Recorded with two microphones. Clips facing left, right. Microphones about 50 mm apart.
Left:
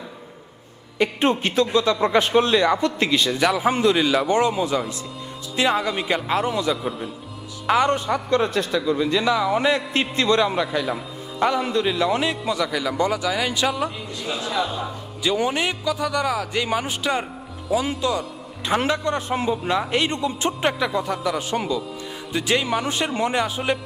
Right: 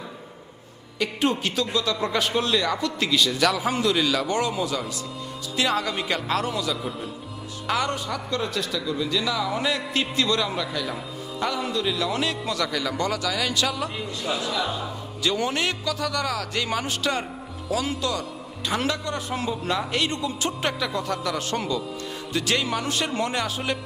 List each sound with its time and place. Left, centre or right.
0.9 s a man's voice: left
5.7 s a man's voice: centre; by 12.0 s left
12.1 s speech: centre
14.3 s a man's voice: left
14.8 s speech: centre
18.7 s a man's voice: left